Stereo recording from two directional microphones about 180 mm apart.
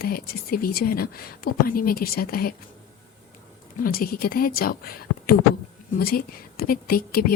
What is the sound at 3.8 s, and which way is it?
Speech, 55° left (ahead or behind).